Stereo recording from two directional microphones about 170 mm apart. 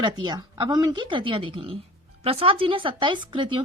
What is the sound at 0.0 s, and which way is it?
A woman's voice, 25° right (ahead or behind).